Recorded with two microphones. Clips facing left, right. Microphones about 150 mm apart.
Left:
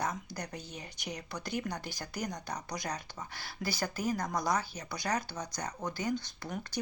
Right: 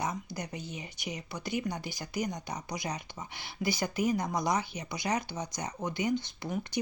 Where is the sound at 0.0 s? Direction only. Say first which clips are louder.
Right 1 dB; 10° right (ahead or behind).